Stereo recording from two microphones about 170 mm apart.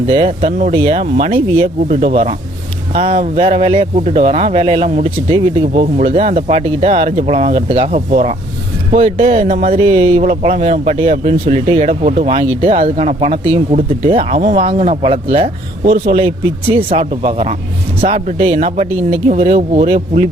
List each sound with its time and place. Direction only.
0.1 s speech: 40° right (ahead or behind)